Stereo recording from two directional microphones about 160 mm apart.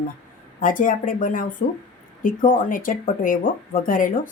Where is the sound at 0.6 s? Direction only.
60° left (ahead or behind).